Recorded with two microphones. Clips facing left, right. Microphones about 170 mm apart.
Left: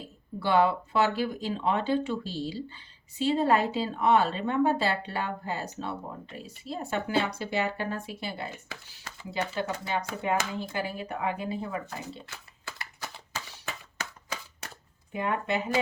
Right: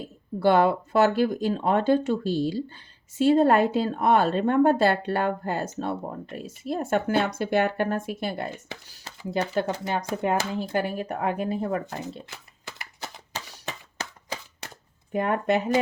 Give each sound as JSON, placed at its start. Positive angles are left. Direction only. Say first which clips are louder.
{"t": 0.3, "sound": "speech", "louder": "right 4 dB", "side_deg": -45}
{"t": 12.3, "sound": "a sound", "louder": "right 1 dB", "side_deg": -25}
{"t": 15.1, "sound": "speech", "louder": "right 6 dB", "side_deg": -50}